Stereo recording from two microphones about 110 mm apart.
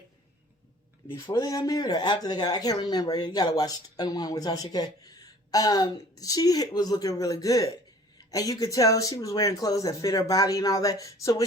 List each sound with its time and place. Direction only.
1.1 s speech: 35° left (ahead or behind)